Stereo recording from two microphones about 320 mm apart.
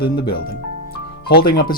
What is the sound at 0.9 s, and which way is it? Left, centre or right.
Music, left.